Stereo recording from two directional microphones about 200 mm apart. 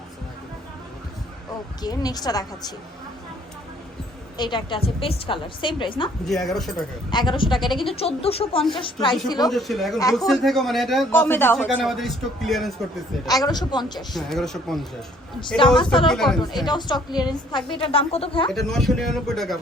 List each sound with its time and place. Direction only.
1.8 s a woman's voice: 20° left (ahead or behind)
4.4 s a woman's voice: 25° left (ahead or behind)
6.2 s speech: centre (ahead or behind)
7.1 s a woman's voice: 20° left (ahead or behind)
9.5 s speech: centre (ahead or behind)
13.2 s a woman's voice: 20° left (ahead or behind)
14.1 s speech: centre (ahead or behind)
15.8 s a woman's voice: 25° left (ahead or behind)
16.0 s speech: centre (ahead or behind)
16.6 s a woman's voice: 20° left (ahead or behind)
18.5 s speech: centre (ahead or behind)